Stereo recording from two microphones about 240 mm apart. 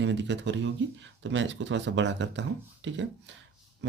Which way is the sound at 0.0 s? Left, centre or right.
Right.